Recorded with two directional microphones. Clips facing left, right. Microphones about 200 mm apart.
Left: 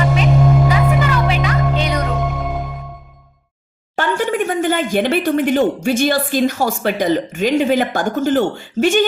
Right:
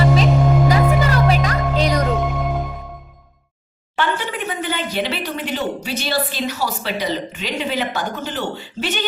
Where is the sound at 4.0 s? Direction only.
45° left (ahead or behind).